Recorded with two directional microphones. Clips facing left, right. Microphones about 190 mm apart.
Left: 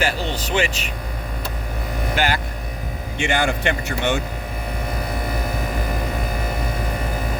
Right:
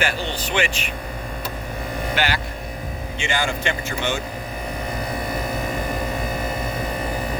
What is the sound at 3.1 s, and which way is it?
A man's voice, 60° left (ahead or behind).